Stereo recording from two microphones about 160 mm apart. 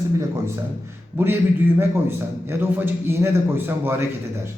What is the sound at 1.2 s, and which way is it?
A man's voice, 10° right (ahead or behind).